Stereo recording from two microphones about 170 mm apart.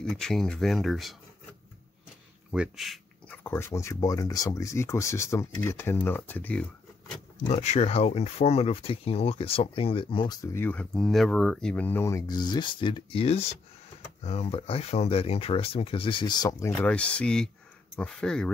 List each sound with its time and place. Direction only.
0.0 s speech: 5° left (ahead or behind)
2.5 s speech: 5° right (ahead or behind)
3.4 s speech: 15° left (ahead or behind)
7.4 s speech: 40° left (ahead or behind); by 18.5 s 5° left (ahead or behind)